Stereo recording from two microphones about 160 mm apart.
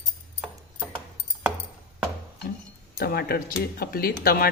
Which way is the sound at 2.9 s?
80° left.